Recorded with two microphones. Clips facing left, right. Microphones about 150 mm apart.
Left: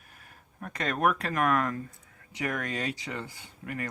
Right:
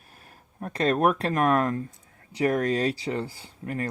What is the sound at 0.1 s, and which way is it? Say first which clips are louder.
Speech: right 3 dB; 30° right (ahead or behind).